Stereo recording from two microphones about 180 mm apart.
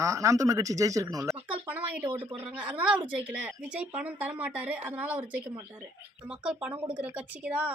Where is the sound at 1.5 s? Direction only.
10° right (ahead or behind).